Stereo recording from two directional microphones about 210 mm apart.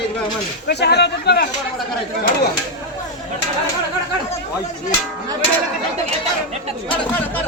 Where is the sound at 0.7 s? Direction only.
50° left (ahead or behind).